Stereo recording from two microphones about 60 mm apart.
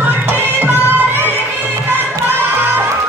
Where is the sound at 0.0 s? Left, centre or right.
Right.